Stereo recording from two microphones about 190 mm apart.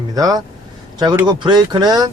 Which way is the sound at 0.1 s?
20° right (ahead or behind).